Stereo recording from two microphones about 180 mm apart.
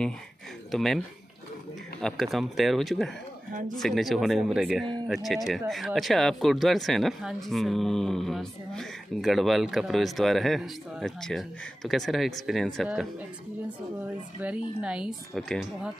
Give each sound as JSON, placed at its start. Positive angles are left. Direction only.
{"t": 0.7, "sound": "speech", "side_deg": 0}
{"t": 14.4, "sound": "speech", "side_deg": -5}